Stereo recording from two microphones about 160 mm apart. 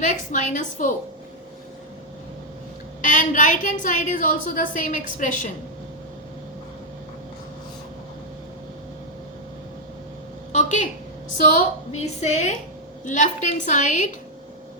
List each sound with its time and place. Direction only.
0.0 s a woman's voice: 50° left (ahead or behind)
3.0 s a woman's voice: 55° left (ahead or behind)
10.5 s a sound: 50° left (ahead or behind)
11.4 s a woman's voice: 50° left (ahead or behind)